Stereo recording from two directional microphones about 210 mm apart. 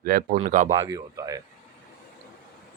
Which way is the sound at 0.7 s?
15° right (ahead or behind).